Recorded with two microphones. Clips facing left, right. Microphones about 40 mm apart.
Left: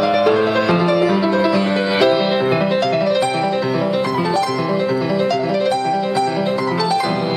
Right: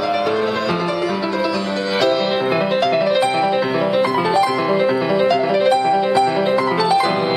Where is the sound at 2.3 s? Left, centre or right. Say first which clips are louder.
Left 1 dB; centre.